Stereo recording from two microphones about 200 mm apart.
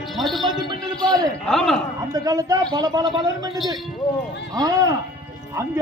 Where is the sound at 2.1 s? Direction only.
20° right (ahead or behind).